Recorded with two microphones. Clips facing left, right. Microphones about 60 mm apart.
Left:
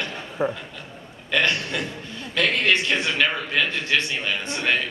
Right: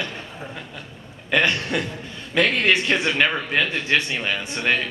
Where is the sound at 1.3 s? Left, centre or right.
Centre.